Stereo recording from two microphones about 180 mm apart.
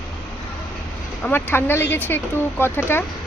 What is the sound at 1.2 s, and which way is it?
Speech, 10° left (ahead or behind).